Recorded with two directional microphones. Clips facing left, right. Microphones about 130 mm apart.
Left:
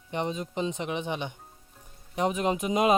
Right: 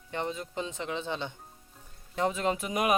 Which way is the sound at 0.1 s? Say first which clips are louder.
Left 3 dB; 20° left (ahead or behind).